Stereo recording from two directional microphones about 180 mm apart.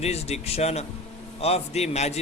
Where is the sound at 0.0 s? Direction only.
35° left (ahead or behind).